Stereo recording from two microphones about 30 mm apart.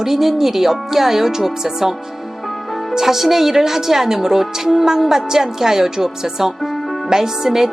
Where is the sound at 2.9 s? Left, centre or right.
Centre.